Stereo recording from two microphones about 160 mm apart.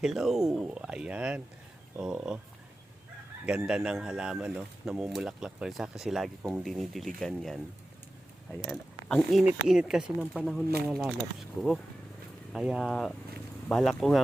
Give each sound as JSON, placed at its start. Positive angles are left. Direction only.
{"t": 0.0, "sound": "speech", "side_deg": 0}
{"t": 3.4, "sound": "speech", "side_deg": -5}
{"t": 8.6, "sound": "speech", "side_deg": 0}